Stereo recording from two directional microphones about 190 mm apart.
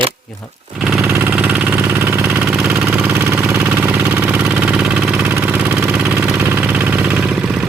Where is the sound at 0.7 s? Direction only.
Centre (ahead or behind).